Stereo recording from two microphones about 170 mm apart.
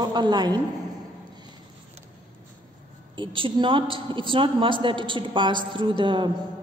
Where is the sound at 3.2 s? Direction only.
30° right (ahead or behind).